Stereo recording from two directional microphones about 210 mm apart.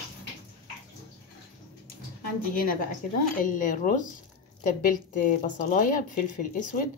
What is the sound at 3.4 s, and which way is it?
Speech, 40° left (ahead or behind).